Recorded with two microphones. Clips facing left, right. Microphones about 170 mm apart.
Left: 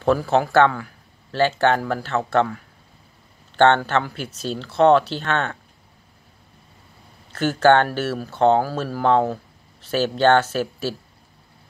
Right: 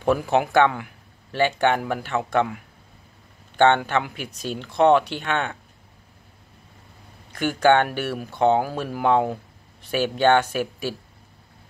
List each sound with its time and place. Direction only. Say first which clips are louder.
0.0 s speech: left 2 dB; 15° right (ahead or behind)
7.3 s speech: left 2 dB; 10° right (ahead or behind)